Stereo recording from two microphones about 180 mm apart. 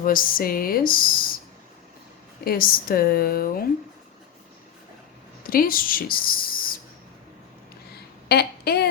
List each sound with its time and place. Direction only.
0.0 s speech: 50° left (ahead or behind)
2.4 s a woman's voice: 55° left (ahead or behind)
5.4 s speech: 55° left (ahead or behind)
8.3 s speech: 60° left (ahead or behind)